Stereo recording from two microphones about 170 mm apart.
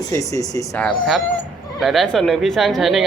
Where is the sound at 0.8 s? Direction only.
5° left (ahead or behind).